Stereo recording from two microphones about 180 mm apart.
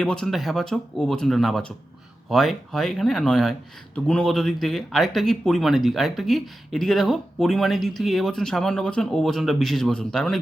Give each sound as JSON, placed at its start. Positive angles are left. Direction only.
{"t": 0.0, "sound": "speech", "side_deg": 5}